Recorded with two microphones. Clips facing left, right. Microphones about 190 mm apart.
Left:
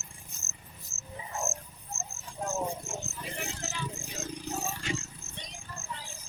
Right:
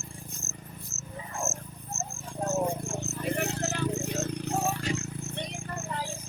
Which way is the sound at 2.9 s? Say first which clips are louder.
Right 8 dB; 60° right (ahead or behind).